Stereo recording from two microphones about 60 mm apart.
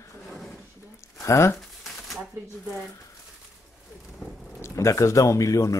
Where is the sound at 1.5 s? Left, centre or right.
Centre.